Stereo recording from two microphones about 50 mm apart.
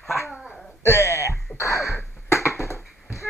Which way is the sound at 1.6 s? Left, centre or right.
Left.